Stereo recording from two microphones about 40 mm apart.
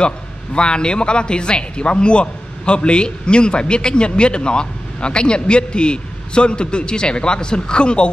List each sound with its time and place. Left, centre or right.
0.6 s a man's voice: left